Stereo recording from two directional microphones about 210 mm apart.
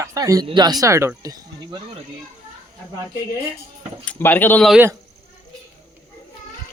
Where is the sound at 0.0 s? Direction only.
15° right (ahead or behind).